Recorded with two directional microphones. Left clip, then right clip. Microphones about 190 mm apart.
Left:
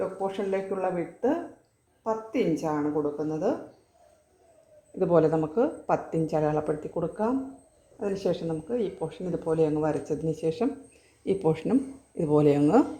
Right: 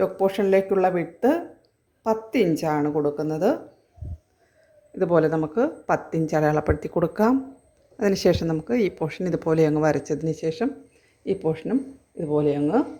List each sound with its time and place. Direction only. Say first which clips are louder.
0.2 s a woman's voice: right 9 dB; 55° right (ahead or behind)
4.9 s speech: right 2 dB; 10° right (ahead or behind)
6.9 s speech: right 9 dB; 35° right (ahead or behind)
10.1 s speech: right 3 dB; 15° right (ahead or behind); by 12.8 s 5° left (ahead or behind)